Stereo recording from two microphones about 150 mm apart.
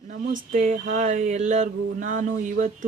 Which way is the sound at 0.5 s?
55° right (ahead or behind).